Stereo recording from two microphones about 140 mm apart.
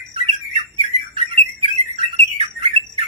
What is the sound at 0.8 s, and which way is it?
Bird, 50° right (ahead or behind).